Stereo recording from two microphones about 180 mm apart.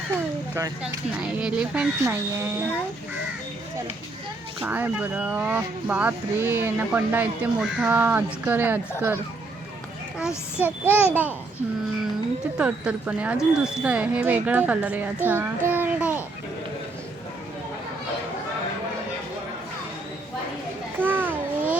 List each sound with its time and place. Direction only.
0.5 s speech: 15° right (ahead or behind)
1.3 s speech: 5° right (ahead or behind)
4.6 s speech: 10° right (ahead or behind)
10.2 s speech: 5° right (ahead or behind)
12.5 s a child's voice: 5° right (ahead or behind)
21.0 s a sound: 10° right (ahead or behind)